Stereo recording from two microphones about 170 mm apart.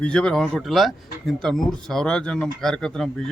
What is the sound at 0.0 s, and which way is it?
Speech, 5° left (ahead or behind).